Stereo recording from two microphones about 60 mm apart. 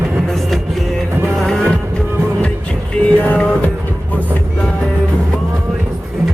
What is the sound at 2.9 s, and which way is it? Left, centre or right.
Music, left.